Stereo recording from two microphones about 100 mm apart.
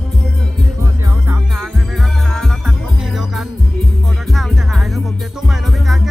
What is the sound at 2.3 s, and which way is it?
Music, 5° left (ahead or behind).